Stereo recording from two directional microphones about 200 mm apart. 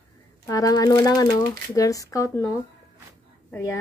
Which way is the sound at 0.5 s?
15° left (ahead or behind).